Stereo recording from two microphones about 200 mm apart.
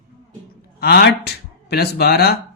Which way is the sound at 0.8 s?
50° left (ahead or behind).